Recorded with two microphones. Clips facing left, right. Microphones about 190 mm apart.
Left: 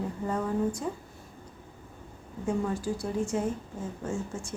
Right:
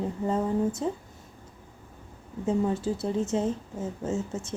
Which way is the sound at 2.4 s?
25° right (ahead or behind).